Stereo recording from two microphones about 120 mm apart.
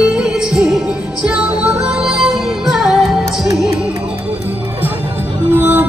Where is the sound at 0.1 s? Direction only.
5° right (ahead or behind).